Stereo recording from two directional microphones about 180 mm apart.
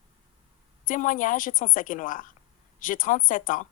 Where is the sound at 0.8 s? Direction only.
45° left (ahead or behind).